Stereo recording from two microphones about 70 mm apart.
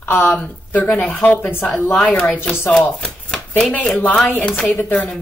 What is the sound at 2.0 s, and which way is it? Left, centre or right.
Speech, centre.